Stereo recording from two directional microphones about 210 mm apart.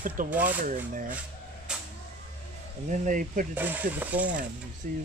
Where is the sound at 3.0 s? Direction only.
40° right (ahead or behind).